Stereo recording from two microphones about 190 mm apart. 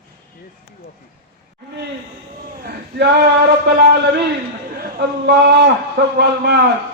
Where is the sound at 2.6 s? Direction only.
60° right (ahead or behind).